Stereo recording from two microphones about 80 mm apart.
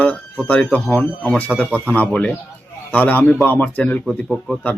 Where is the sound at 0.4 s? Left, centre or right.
Centre.